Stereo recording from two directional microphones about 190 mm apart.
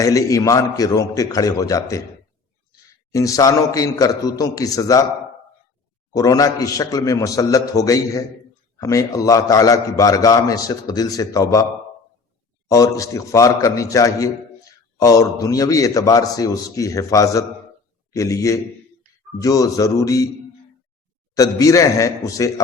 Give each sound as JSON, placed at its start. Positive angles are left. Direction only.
{"t": 0.0, "sound": "a man's voice", "side_deg": 15}
{"t": 3.1, "sound": "a man's voice", "side_deg": 15}
{"t": 6.1, "sound": "a man's voice", "side_deg": 20}
{"t": 12.6, "sound": "a man's voice", "side_deg": 15}
{"t": 21.3, "sound": "a man's voice", "side_deg": 15}